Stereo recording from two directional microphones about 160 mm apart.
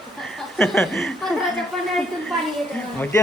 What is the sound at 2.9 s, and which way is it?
Speech, 10° left (ahead or behind).